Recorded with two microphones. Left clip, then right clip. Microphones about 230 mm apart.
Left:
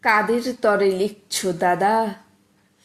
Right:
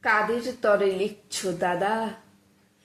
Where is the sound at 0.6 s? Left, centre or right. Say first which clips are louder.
Left 3 dB; left.